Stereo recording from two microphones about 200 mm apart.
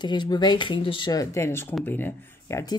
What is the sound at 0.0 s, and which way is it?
Speech, 20° left (ahead or behind).